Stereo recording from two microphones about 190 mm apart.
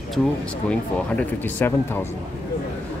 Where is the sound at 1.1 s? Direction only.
10° left (ahead or behind).